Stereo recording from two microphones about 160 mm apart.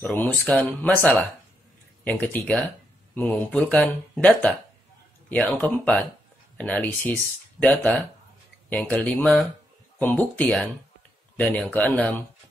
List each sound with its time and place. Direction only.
0.0 s speech: 5° left (ahead or behind)